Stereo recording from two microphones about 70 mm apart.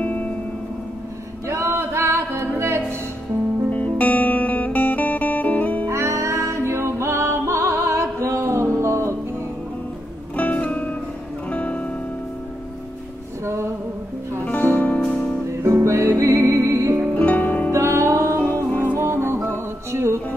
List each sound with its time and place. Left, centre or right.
0.0 s music: left
1.5 s music: right
3.7 s music: left
5.9 s music: right
10.3 s music: left
14.4 s music: left
15.6 s music: right
17.1 s music: left
17.7 s music: right